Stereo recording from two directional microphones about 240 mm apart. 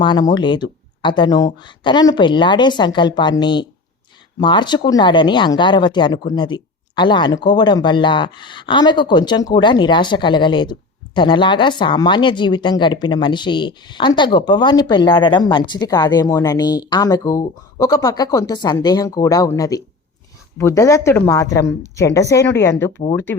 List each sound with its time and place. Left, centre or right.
0.0 s speech: centre